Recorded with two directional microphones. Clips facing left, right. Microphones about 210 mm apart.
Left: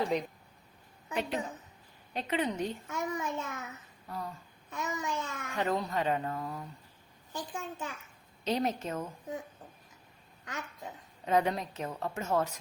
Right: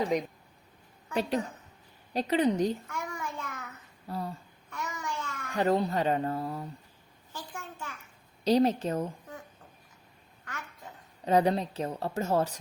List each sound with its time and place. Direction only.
1.1 s a woman's voice: 35° right (ahead or behind)
2.8 s a child's voice: 20° left (ahead or behind)
4.1 s a woman's voice: 35° right (ahead or behind)
4.7 s babbling: 20° left (ahead or behind)
5.5 s a woman's voice: 35° right (ahead or behind)
7.3 s a child's voice: 20° left (ahead or behind)
8.4 s a woman's voice: 35° right (ahead or behind)
10.4 s babbling: 20° left (ahead or behind)
11.3 s a woman's voice: 35° right (ahead or behind)